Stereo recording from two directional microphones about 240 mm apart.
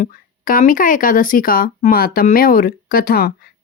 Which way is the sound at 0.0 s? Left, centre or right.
Left.